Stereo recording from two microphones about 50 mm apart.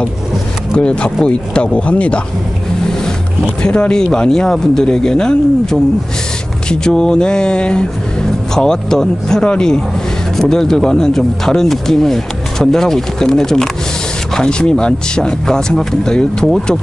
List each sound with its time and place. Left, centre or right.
0.7 s speech: centre
3.6 s speech: centre